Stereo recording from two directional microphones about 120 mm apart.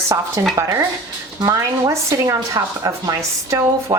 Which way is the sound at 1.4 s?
30° right (ahead or behind).